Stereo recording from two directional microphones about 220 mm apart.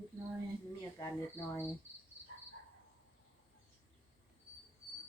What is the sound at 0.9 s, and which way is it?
Speech, 15° left (ahead or behind).